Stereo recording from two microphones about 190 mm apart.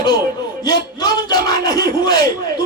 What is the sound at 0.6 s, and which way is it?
A man's voice, 20° left (ahead or behind).